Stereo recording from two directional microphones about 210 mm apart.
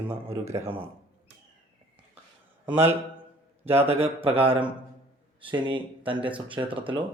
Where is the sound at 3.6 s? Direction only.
10° right (ahead or behind).